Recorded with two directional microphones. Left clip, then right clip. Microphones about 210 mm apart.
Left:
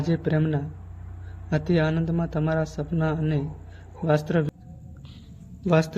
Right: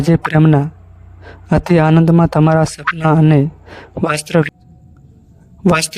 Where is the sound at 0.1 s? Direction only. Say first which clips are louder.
Right 13 dB; 50° right (ahead or behind).